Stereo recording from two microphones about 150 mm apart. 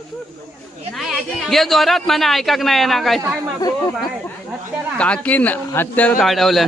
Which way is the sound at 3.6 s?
25° left (ahead or behind).